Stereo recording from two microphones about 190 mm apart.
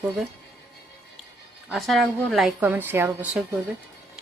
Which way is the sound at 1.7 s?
Centre (ahead or behind).